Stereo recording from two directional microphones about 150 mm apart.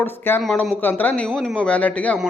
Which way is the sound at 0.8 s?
10° left (ahead or behind).